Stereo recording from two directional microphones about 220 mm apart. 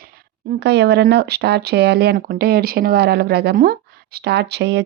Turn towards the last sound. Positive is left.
turn(degrees=-50)  # may be behind; listen again after turning